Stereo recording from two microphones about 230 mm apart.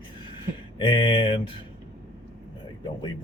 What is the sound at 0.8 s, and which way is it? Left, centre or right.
Speech, left.